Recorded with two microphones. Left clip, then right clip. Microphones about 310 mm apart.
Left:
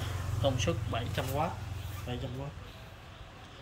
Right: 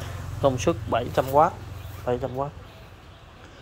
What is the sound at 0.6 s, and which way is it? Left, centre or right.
Speech, centre.